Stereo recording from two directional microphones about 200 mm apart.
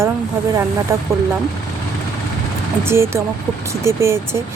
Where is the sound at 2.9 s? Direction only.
10° right (ahead or behind).